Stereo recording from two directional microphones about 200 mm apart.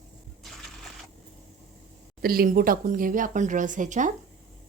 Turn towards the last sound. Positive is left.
turn(degrees=-40)  # may be behind; listen again after turning